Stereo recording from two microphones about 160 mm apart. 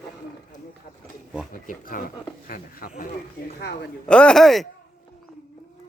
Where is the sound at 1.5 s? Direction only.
60° left (ahead or behind).